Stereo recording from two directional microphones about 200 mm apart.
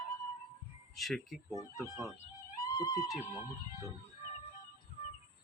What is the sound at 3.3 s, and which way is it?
Music, 15° right (ahead or behind).